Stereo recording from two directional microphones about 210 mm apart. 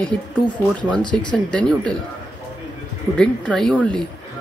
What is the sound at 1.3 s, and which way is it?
Speech, 5° left (ahead or behind).